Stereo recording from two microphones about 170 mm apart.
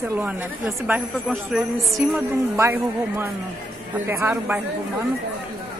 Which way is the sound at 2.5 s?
15° right (ahead or behind).